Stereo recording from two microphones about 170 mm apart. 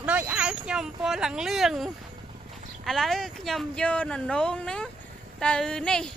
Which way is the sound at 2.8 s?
Centre (ahead or behind).